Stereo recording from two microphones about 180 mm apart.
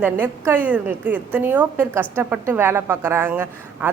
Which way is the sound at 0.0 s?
10° right (ahead or behind).